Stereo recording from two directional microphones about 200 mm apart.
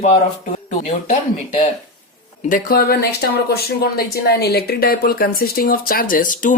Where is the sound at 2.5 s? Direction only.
45° left (ahead or behind).